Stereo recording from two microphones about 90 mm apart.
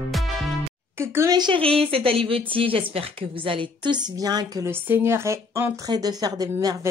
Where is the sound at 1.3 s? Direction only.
55° right (ahead or behind).